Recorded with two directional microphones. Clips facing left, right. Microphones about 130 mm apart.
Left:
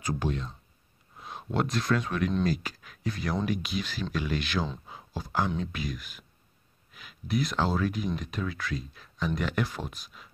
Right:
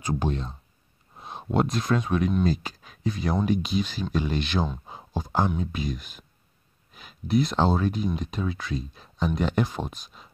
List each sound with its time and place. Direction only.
0.0 s speech: 25° right (ahead or behind)
4.8 s a sound: 25° right (ahead or behind)
5.5 s speech: 10° right (ahead or behind)
5.8 s speech: 25° right (ahead or behind)